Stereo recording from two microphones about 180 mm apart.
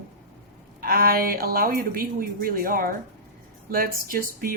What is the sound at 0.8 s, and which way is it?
A woman's voice, 55° right (ahead or behind).